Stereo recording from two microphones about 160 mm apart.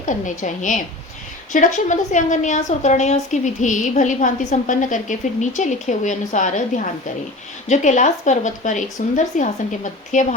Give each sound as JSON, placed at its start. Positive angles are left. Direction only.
{"t": 0.0, "sound": "a woman's voice", "side_deg": 50}